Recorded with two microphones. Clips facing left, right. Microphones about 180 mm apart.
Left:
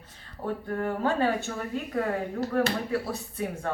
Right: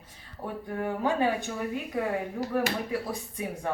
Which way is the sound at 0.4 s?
10° right (ahead or behind).